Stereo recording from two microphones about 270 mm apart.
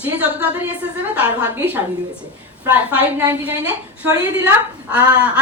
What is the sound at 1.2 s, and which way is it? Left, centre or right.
Speech, centre.